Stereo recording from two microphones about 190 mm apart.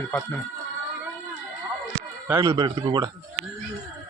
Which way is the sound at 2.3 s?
15° right (ahead or behind).